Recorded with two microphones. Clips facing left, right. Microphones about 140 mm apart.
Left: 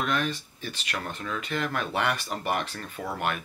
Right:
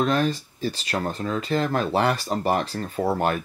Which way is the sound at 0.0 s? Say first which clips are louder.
Right 6 dB; 35° right (ahead or behind).